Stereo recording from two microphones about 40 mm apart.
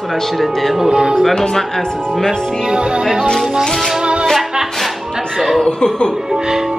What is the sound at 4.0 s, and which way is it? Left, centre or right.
Music, right.